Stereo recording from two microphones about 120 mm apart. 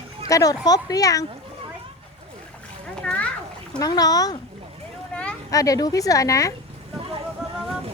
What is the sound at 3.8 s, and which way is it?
Speech, 30° left (ahead or behind).